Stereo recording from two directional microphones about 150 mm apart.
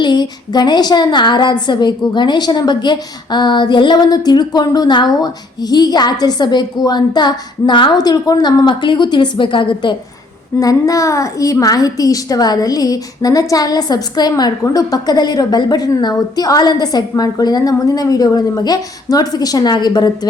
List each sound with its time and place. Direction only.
0.0 s a woman's voice: 30° left (ahead or behind)
10.6 s a woman's voice: 25° left (ahead or behind)